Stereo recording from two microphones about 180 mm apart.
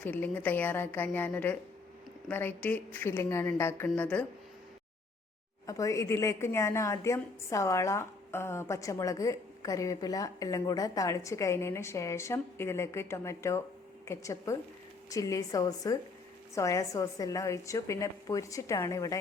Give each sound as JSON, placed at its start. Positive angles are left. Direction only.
{"t": 0.0, "sound": "a woman's voice", "side_deg": 10}
{"t": 5.6, "sound": "a woman's voice", "side_deg": 20}